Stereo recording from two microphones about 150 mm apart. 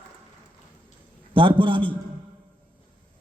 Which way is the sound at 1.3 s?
35° right (ahead or behind).